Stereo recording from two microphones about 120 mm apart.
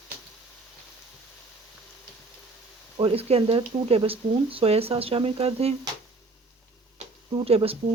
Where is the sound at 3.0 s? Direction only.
50° right (ahead or behind).